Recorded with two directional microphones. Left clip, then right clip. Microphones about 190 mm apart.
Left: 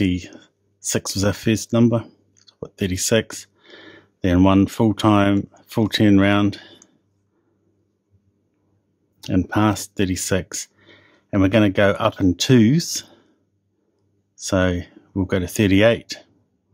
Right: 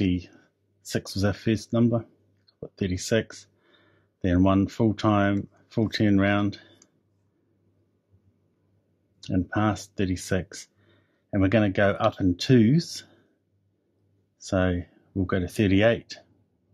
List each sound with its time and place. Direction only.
0.0 s speech: 30° left (ahead or behind)
9.2 s speech: 25° left (ahead or behind)
14.3 s speech: 25° left (ahead or behind)